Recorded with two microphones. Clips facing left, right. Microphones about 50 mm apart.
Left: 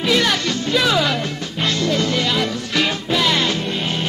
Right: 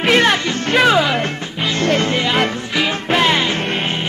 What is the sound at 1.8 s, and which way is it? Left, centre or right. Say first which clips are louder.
Music: right 4 dB; right.